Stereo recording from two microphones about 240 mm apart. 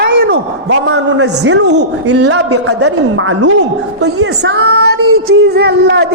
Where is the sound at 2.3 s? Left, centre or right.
Right.